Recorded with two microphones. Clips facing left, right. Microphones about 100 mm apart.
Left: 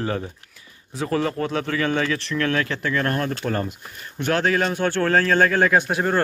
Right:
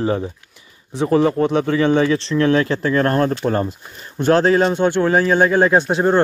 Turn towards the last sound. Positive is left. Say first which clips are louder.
# right 5 dB
turn(degrees=-25)  # may be behind; listen again after turning